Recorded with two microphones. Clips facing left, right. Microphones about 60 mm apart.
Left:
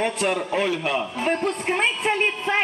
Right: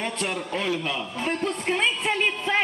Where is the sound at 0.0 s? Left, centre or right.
Left.